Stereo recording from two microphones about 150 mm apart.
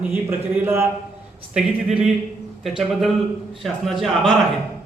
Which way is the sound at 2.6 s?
Centre (ahead or behind).